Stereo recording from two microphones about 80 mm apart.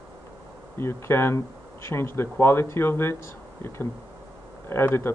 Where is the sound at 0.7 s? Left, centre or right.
Left.